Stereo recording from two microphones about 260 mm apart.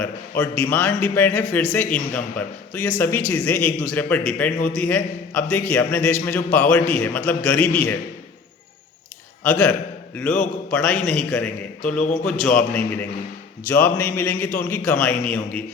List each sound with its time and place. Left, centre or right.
0.0 s a man's voice: centre
9.4 s a man's voice: centre
11.9 s speech: left
12.2 s a man's voice: centre